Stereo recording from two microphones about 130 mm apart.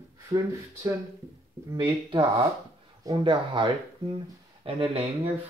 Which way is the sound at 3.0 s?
35° right (ahead or behind).